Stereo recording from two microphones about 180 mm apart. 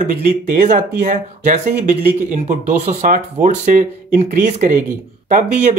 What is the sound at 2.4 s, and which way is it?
Speech, 35° right (ahead or behind).